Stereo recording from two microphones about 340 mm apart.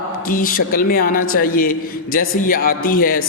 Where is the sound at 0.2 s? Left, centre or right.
Left.